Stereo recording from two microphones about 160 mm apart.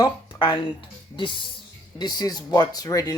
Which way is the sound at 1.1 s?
30° left (ahead or behind).